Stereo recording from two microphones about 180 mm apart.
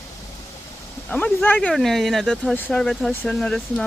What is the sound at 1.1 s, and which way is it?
Speech, 5° left (ahead or behind).